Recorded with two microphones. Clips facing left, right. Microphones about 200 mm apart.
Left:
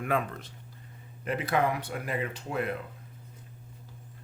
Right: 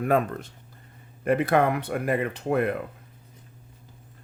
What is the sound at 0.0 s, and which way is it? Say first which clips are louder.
Speech: right 7 dB; 45° right (ahead or behind).